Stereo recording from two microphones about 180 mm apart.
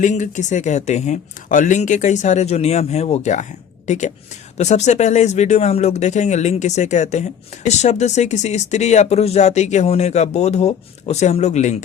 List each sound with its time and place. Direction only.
0.0 s speech: 45° left (ahead or behind)